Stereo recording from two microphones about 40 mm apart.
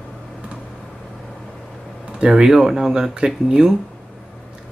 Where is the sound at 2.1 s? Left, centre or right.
Right.